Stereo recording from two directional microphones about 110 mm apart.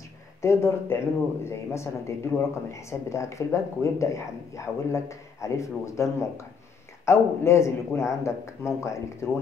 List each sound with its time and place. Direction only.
0.4 s speech: 25° left (ahead or behind)